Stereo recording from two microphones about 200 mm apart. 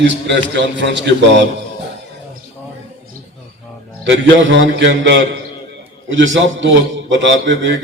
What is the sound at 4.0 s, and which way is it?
A man's voice, 65° right (ahead or behind).